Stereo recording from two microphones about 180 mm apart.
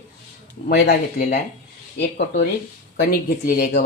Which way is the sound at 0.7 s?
65° left (ahead or behind).